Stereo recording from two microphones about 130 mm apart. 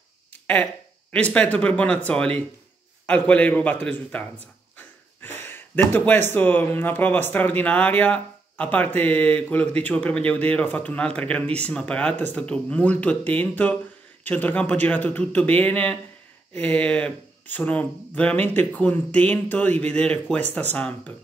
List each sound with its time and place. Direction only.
1.3 s speech: 10° left (ahead or behind)
4.7 s a sound: 15° left (ahead or behind)
6.3 s speech: 15° left (ahead or behind)